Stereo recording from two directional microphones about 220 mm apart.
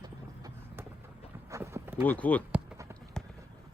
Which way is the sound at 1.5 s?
15° right (ahead or behind).